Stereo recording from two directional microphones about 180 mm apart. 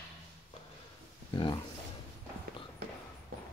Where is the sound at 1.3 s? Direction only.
25° left (ahead or behind).